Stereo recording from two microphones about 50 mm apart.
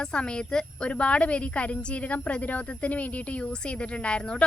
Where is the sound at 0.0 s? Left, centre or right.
Centre.